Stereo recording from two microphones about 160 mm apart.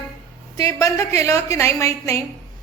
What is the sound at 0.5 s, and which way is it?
A woman's voice, 20° left (ahead or behind).